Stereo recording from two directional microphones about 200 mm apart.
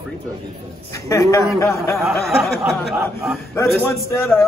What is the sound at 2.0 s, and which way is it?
A man's voice, centre (ahead or behind).